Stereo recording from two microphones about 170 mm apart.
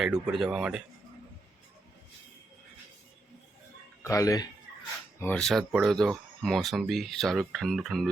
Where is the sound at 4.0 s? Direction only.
20° left (ahead or behind).